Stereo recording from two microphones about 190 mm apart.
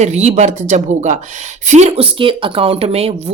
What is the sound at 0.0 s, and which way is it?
Speech, 35° right (ahead or behind).